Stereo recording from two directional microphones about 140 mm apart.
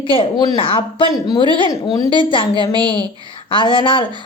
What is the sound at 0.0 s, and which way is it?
A woman's voice, 40° left (ahead or behind).